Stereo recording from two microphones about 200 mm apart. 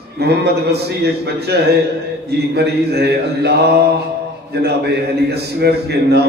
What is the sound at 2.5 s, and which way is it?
Speech, 55° right (ahead or behind).